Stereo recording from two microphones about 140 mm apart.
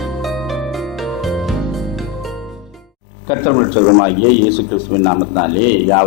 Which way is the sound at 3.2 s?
20° left (ahead or behind).